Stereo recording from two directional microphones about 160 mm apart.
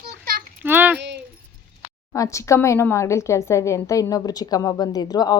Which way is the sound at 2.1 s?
20° left (ahead or behind).